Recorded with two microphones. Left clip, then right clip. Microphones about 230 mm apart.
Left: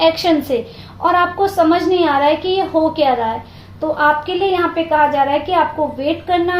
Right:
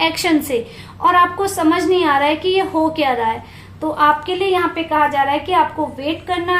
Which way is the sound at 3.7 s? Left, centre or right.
Right.